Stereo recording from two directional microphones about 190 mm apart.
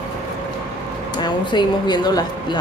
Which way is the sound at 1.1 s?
25° left (ahead or behind).